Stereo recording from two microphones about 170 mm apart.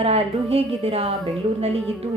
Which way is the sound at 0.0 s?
35° right (ahead or behind).